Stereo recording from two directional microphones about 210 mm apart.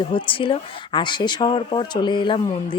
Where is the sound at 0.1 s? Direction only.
25° left (ahead or behind).